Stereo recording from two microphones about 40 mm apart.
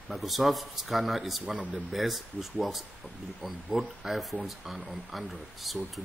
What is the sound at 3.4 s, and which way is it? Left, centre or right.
Speech, centre.